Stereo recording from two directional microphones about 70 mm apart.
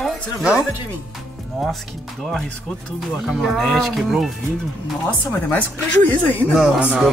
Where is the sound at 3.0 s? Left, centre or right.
Centre.